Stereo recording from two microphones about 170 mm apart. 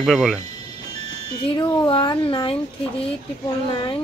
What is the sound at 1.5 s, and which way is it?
Speech, 30° left (ahead or behind).